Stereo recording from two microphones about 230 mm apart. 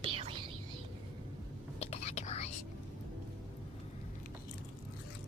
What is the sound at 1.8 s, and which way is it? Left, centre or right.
Whispering, left.